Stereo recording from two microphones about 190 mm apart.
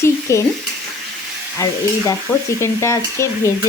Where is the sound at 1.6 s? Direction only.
15° left (ahead or behind).